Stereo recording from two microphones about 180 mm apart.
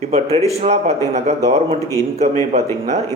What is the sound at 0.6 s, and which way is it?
Speech, 35° right (ahead or behind).